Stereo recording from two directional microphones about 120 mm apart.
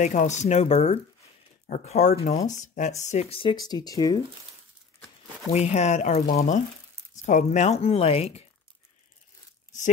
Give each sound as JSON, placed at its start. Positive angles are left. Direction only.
{"t": 0.0, "sound": "speech", "side_deg": 85}
{"t": 1.7, "sound": "speech", "side_deg": 70}
{"t": 3.0, "sound": "speech", "side_deg": 70}
{"t": 3.3, "sound": "speech", "side_deg": 40}
{"t": 5.5, "sound": "speech", "side_deg": 70}
{"t": 7.2, "sound": "speech", "side_deg": 90}